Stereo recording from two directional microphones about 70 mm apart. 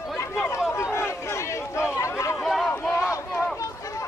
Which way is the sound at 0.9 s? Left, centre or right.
Left.